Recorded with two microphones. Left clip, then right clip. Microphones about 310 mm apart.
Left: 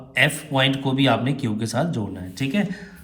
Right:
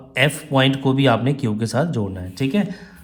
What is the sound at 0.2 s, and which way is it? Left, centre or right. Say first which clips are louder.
Speech: right 2 dB; right.